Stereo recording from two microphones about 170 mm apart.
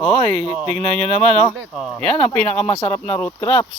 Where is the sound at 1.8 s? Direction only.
Centre (ahead or behind).